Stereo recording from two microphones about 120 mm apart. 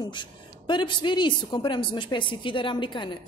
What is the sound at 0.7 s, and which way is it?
A woman's voice, 40° left (ahead or behind).